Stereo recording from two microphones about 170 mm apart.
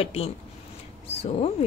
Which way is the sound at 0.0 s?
35° left (ahead or behind).